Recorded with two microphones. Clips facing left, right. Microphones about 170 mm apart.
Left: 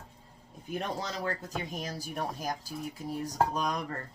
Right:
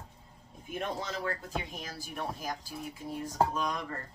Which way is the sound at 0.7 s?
35° left (ahead or behind).